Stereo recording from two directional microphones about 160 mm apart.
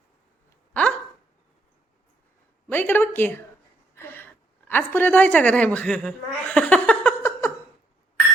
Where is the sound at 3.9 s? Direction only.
15° left (ahead or behind).